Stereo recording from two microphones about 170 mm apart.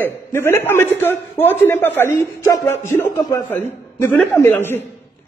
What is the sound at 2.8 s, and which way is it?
Music, 15° left (ahead or behind).